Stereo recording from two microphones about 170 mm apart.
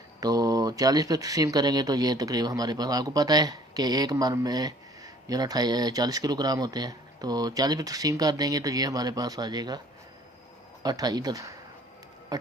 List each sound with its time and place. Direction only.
0.2 s speech: 20° right (ahead or behind)
10.8 s speech: 25° right (ahead or behind)
12.3 s music: 25° right (ahead or behind)